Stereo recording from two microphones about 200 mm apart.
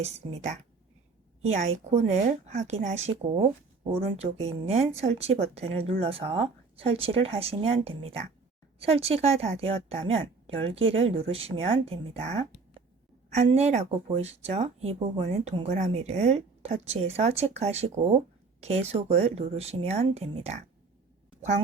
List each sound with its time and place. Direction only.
0.0 s a woman's voice: 35° right (ahead or behind)